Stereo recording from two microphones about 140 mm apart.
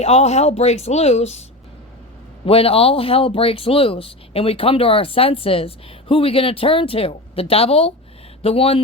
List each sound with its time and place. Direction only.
0.0 s speech: 50° left (ahead or behind)